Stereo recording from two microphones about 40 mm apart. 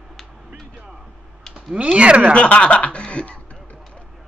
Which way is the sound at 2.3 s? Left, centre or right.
Left.